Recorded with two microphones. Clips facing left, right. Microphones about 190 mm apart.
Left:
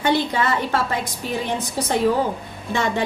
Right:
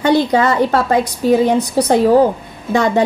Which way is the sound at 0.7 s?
40° right (ahead or behind).